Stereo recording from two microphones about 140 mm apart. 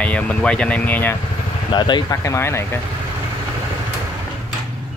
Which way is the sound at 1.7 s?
35° left (ahead or behind).